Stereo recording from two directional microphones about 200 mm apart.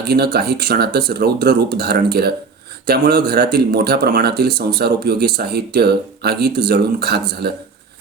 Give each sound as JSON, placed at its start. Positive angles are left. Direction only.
{"t": 0.1, "sound": "speech", "side_deg": -50}